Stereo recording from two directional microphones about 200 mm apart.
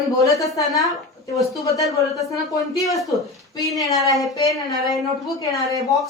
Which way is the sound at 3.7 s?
15° left (ahead or behind).